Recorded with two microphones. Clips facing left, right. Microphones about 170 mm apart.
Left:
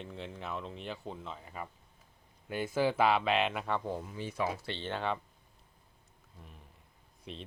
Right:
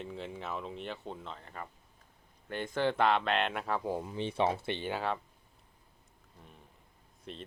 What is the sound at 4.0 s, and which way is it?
Speech, 25° right (ahead or behind).